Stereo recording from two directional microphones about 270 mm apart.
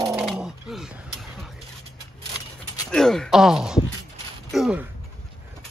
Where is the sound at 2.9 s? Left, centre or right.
Centre.